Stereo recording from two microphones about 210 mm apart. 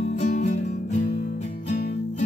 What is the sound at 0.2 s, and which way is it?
Music, 40° left (ahead or behind).